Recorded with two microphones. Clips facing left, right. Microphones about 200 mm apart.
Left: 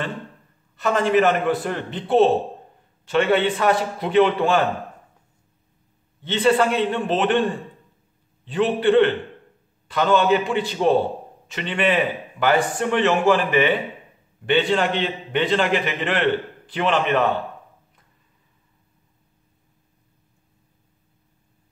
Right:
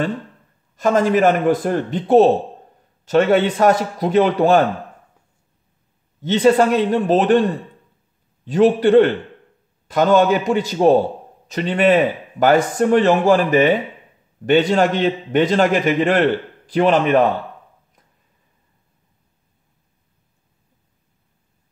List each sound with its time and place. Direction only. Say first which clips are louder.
0.7 s a man's voice: right 3 dB; 40° right (ahead or behind)
6.2 s a man's voice: right 5 dB; 40° right (ahead or behind)